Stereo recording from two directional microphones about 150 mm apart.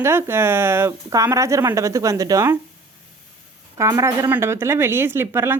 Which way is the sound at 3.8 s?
20° right (ahead or behind).